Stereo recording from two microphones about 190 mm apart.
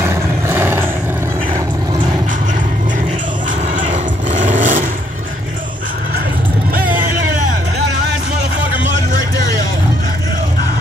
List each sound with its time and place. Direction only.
0.1 s roar: 10° right (ahead or behind)
3.8 s vehicle: 35° right (ahead or behind)